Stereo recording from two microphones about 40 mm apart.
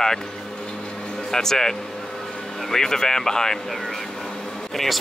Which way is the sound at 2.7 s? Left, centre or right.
Centre.